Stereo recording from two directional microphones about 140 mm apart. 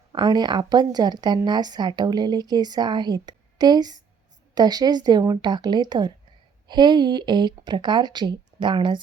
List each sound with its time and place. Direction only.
0.1 s speech: 30° right (ahead or behind)